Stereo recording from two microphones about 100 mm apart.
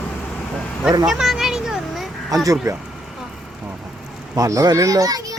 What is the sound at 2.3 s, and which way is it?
Speech, 40° right (ahead or behind).